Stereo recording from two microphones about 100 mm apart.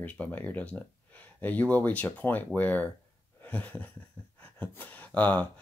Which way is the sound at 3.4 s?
15° left (ahead or behind).